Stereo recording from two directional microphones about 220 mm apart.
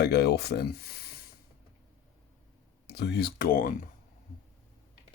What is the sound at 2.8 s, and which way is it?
Speech, 50° left (ahead or behind).